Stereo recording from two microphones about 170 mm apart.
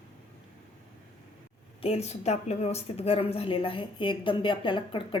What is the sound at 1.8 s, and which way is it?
A woman's voice, 35° left (ahead or behind).